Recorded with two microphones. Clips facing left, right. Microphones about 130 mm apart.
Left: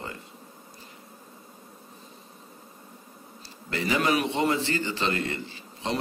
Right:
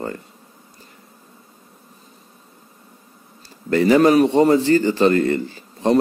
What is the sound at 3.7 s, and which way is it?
A man's voice, 45° right (ahead or behind).